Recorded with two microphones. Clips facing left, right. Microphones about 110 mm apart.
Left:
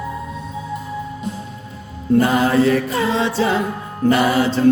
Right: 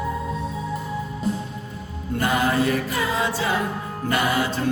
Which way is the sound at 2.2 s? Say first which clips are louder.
Left 6 dB; 30° left (ahead or behind).